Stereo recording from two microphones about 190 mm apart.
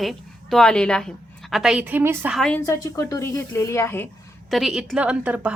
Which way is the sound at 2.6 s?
15° left (ahead or behind).